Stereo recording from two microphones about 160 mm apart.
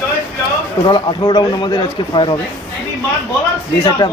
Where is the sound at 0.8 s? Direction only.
30° left (ahead or behind).